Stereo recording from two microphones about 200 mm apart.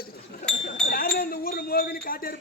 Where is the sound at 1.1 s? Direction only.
45° left (ahead or behind).